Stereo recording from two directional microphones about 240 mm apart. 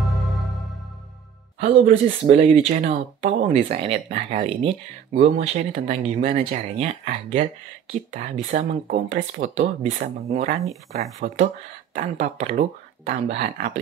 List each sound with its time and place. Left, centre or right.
1.6 s speech: right